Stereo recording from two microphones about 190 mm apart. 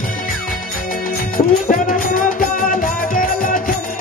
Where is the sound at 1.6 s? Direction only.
50° left (ahead or behind).